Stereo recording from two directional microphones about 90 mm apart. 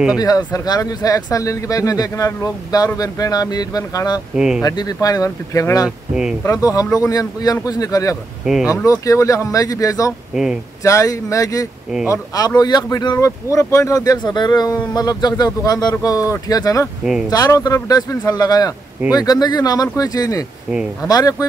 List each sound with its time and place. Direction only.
0.2 s speech: 45° left (ahead or behind)
5.9 s speech: 10° right (ahead or behind)
6.4 s speech: 40° left (ahead or behind)
8.5 s speech: 5° right (ahead or behind)
9.0 s speech: 35° left (ahead or behind)
10.3 s speech: 5° right (ahead or behind)
10.8 s speech: 35° left (ahead or behind)
13.2 s speech: 35° left (ahead or behind)